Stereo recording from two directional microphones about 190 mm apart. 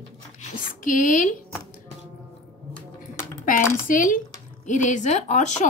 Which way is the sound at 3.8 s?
45° left (ahead or behind).